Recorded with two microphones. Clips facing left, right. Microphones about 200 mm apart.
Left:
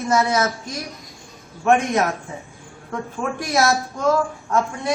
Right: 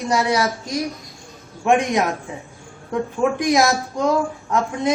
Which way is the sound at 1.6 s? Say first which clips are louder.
Even; 15° right (ahead or behind).